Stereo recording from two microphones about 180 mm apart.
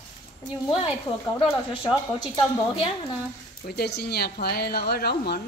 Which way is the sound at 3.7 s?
60° left (ahead or behind).